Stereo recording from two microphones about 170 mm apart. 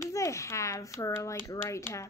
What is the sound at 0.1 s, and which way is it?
A woman's voice, 20° left (ahead or behind).